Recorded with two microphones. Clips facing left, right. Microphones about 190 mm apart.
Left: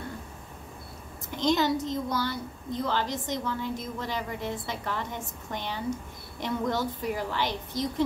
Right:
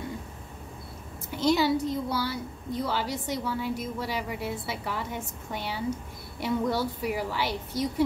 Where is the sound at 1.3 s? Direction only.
10° right (ahead or behind).